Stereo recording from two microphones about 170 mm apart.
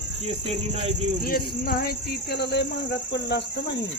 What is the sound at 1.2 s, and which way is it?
Speech, 60° left (ahead or behind).